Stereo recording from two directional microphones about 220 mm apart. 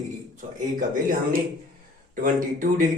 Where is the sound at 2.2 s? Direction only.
40° right (ahead or behind).